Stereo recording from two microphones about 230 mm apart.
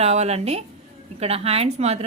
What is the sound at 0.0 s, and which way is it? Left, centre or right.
A woman's voice, right.